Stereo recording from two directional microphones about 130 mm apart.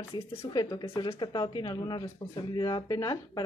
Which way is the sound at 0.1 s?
35° left (ahead or behind).